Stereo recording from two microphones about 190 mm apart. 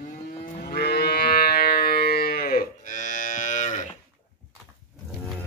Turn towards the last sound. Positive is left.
turn(degrees=40)  # may be behind; listen again after turning